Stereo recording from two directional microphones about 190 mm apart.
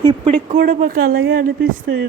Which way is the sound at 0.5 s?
50° right (ahead or behind).